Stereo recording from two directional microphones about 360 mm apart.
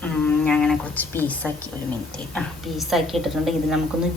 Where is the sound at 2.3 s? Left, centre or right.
Centre.